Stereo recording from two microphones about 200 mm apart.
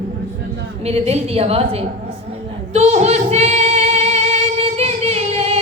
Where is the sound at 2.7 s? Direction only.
35° right (ahead or behind).